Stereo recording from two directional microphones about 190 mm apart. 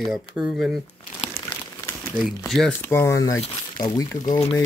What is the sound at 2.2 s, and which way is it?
Speech, centre (ahead or behind).